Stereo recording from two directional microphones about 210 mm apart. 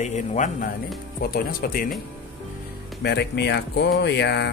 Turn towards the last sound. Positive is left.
turn(degrees=55)  # may be behind; listen again after turning